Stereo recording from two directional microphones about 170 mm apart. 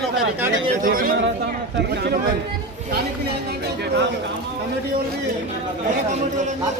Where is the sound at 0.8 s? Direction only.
55° right (ahead or behind).